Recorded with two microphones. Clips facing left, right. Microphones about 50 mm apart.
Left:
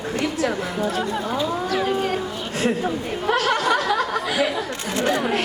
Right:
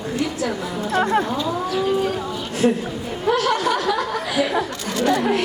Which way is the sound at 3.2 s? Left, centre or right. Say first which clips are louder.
Right 1 dB; left.